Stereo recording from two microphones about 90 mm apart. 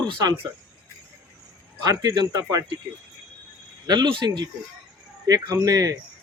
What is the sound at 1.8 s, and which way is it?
Speech, 45° right (ahead or behind).